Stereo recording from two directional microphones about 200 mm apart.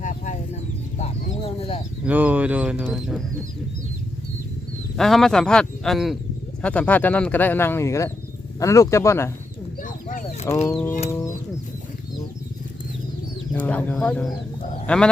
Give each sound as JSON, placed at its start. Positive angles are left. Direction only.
{"t": 0.9, "sound": "a sound", "side_deg": 30}
{"t": 2.0, "sound": "speech", "side_deg": -10}
{"t": 4.9, "sound": "speech", "side_deg": 0}
{"t": 9.8, "sound": "a sound", "side_deg": 40}
{"t": 10.7, "sound": "speech", "side_deg": 10}
{"t": 11.1, "sound": "bird", "side_deg": 15}
{"t": 13.5, "sound": "speech", "side_deg": 10}